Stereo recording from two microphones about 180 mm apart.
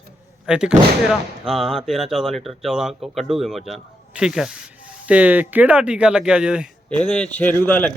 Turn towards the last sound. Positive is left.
turn(degrees=10)  # may be behind; listen again after turning